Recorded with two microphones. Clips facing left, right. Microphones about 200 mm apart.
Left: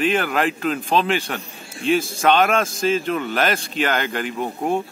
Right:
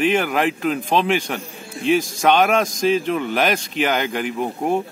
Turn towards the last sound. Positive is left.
turn(degrees=-5)  # may be behind; listen again after turning